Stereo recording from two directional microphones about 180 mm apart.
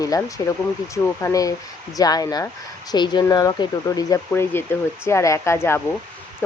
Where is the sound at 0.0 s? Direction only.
20° left (ahead or behind).